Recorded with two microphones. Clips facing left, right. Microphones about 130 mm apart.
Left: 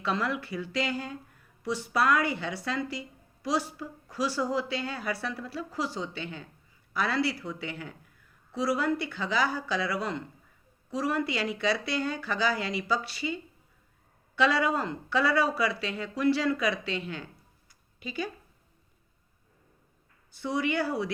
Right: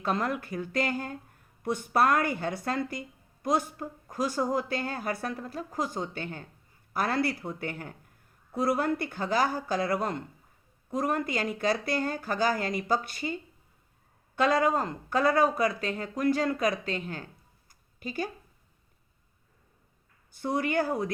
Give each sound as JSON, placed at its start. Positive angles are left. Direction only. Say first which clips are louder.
{"t": 0.0, "sound": "speech", "louder": "right 1 dB", "side_deg": -45}
{"t": 17.7, "sound": "a sound", "louder": "right 2 dB", "side_deg": -45}
{"t": 20.3, "sound": "speech", "louder": "right 1 dB", "side_deg": -50}